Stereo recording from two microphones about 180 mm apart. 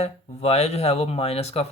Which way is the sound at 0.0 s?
35° left (ahead or behind).